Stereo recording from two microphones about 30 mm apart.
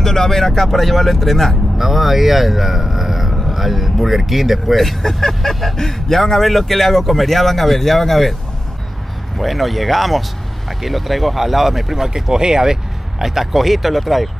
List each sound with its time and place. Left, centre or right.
0.0 s speech: centre
1.8 s speech: centre
9.4 s speech: centre
12.1 s speech: right; by 14.3 s centre